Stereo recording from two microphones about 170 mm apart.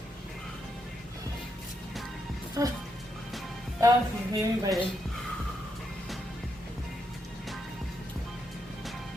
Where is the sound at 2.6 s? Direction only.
15° right (ahead or behind).